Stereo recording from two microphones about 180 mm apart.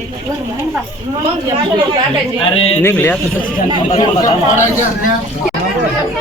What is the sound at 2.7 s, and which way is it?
Speech, 10° left (ahead or behind).